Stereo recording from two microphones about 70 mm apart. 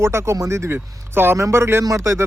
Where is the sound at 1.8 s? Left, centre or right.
Right.